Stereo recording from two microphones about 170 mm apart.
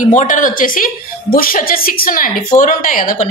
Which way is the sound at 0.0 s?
50° left (ahead or behind).